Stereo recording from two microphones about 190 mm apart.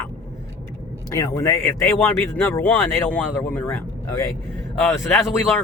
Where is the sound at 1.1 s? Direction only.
15° left (ahead or behind).